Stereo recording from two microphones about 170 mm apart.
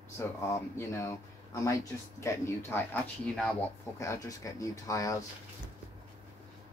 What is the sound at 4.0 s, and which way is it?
Speech, 20° left (ahead or behind).